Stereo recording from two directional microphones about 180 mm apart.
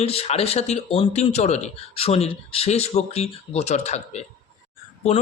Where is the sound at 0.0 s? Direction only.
35° left (ahead or behind).